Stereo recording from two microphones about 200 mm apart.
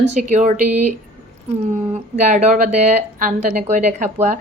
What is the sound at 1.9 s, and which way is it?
Speech, 35° right (ahead or behind).